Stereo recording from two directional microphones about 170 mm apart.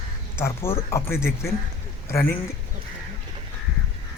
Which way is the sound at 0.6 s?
15° left (ahead or behind).